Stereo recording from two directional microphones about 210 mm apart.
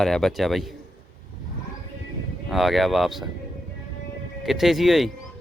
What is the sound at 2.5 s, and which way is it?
Speech, centre (ahead or behind).